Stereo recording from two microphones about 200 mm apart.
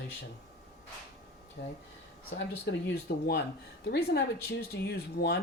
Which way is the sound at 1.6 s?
50° left (ahead or behind).